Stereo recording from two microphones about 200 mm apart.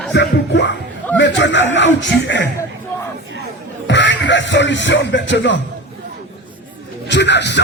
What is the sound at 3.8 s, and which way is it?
Music, 65° left (ahead or behind).